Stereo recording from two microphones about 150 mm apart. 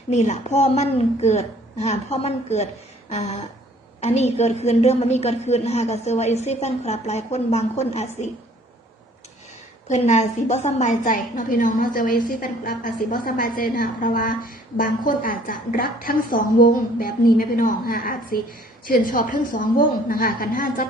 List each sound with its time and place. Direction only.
0.1 s a woman's voice: 50° left (ahead or behind)
9.9 s a woman's voice: 45° left (ahead or behind); by 20.8 s 75° left (ahead or behind)